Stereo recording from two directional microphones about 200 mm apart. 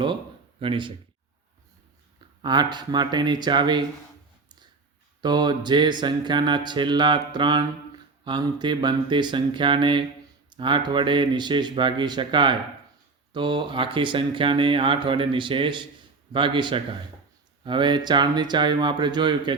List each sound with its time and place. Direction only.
0.6 s mantra: 25° right (ahead or behind)
2.4 s mantra: 20° right (ahead or behind)
5.2 s mantra: 20° right (ahead or behind)